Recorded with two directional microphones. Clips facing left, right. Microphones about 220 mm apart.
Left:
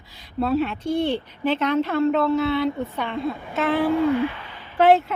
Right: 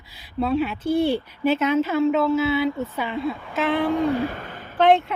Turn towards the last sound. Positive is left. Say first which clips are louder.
# left 1 dB
turn(degrees=5)  # may be behind; listen again after turning